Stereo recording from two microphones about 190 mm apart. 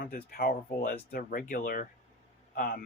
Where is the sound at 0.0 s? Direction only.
50° left (ahead or behind).